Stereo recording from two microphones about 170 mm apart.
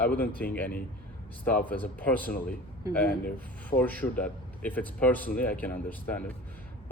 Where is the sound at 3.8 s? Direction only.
10° left (ahead or behind).